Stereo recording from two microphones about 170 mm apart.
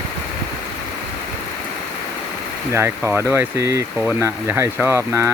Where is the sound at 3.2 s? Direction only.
10° right (ahead or behind).